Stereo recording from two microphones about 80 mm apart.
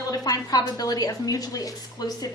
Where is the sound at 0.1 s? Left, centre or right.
Left.